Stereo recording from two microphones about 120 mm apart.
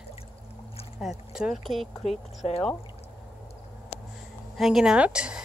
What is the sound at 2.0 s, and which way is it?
Speech, 65° left (ahead or behind).